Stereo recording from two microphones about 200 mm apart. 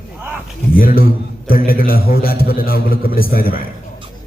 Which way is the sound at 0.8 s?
45° left (ahead or behind).